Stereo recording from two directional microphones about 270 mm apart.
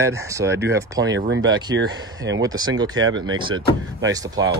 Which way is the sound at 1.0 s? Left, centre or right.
Right.